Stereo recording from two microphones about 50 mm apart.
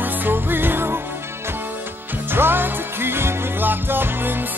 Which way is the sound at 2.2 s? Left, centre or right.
Right.